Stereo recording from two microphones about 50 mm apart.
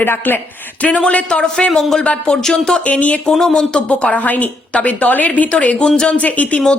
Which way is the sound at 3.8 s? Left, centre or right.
Left.